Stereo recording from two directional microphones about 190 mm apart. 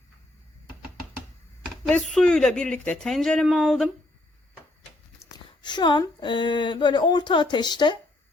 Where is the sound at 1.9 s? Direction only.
5° left (ahead or behind).